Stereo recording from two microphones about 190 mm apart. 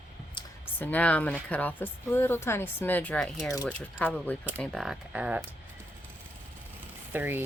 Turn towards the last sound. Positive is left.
turn(degrees=-10)  # may be behind; listen again after turning